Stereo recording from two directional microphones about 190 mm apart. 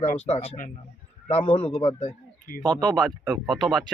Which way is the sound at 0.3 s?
30° left (ahead or behind).